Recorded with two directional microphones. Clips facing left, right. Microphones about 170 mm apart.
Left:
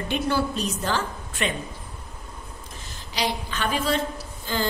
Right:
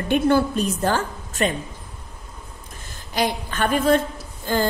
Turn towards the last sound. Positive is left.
turn(degrees=-50)  # may be behind; listen again after turning